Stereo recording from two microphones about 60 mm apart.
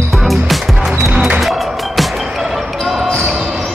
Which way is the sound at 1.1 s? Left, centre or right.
Centre.